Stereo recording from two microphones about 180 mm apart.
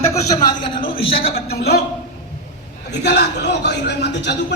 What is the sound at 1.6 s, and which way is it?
Speech, 65° left (ahead or behind).